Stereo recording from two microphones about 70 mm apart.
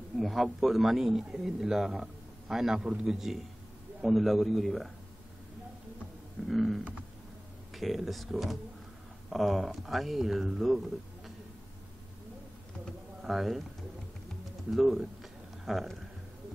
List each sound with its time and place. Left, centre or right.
0.1 s speech: centre
6.4 s speech: centre
13.2 s speech: centre
14.7 s speech: centre